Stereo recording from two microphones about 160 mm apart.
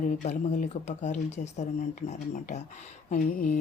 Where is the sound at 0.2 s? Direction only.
50° left (ahead or behind).